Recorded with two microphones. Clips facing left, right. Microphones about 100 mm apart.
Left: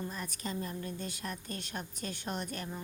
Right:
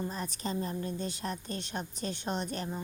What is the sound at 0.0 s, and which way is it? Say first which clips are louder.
A woman's voice: right 4 dB; 30° right (ahead or behind).